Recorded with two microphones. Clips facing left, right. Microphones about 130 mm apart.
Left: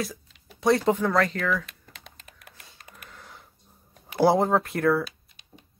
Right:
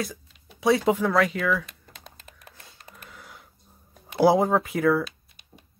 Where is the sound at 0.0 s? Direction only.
Centre (ahead or behind).